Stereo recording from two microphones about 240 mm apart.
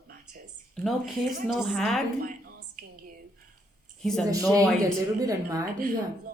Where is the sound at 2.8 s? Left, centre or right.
Right.